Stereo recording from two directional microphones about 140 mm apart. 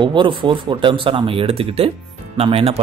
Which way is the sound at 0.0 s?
35° right (ahead or behind).